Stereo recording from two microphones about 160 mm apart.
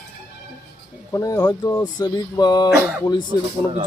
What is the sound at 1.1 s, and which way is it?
Speech, 20° left (ahead or behind).